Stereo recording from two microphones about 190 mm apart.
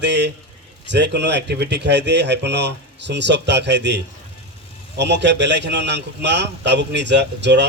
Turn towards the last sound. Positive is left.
turn(degrees=-65)  # may be behind; listen again after turning